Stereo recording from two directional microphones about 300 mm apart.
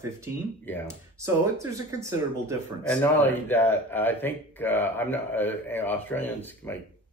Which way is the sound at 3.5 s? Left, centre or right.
Centre.